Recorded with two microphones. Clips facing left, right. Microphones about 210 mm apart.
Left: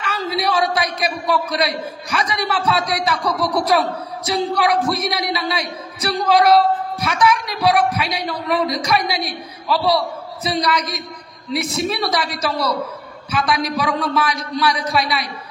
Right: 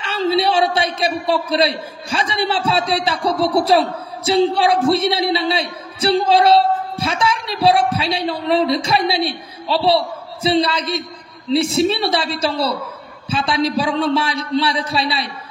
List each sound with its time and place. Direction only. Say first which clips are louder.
0.0 s a man's voice: right 5 dB; 30° right (ahead or behind)